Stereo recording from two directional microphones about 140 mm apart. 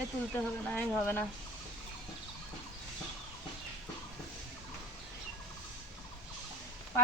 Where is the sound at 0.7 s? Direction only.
10° left (ahead or behind).